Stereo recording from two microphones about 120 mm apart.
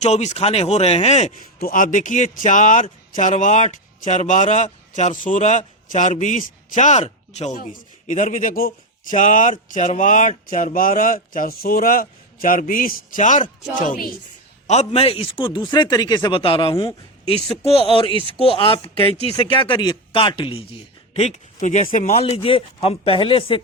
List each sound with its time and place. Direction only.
0.0 s speech: 70° left (ahead or behind)
1.7 s speech: 90° left
13.1 s speech: 90° left
14.7 s speech: 60° left (ahead or behind)
21.1 s speech: 65° left (ahead or behind); by 23.6 s 50° left (ahead or behind)